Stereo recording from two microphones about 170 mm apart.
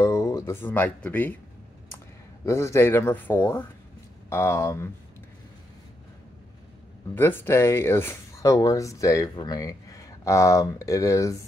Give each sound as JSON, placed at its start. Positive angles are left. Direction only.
{"t": 0.0, "sound": "speech", "side_deg": 20}
{"t": 2.4, "sound": "speech", "side_deg": 15}
{"t": 7.2, "sound": "speech", "side_deg": 15}